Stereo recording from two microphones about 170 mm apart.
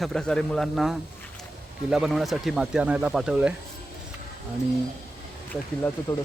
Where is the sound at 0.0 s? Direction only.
5° left (ahead or behind).